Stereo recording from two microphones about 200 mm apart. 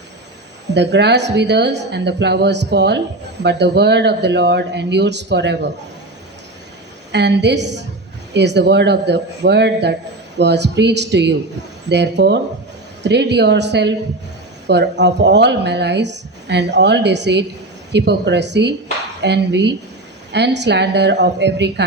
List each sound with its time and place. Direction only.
0.7 s a woman's voice: 60° right (ahead or behind)
7.1 s a woman's voice: 60° right (ahead or behind)